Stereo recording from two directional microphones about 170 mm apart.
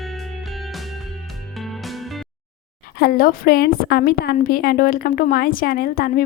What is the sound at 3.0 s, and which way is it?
A woman's voice, 60° left (ahead or behind).